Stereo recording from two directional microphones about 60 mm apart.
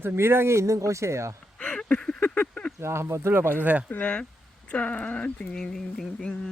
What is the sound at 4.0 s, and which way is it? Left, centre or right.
Speech, centre.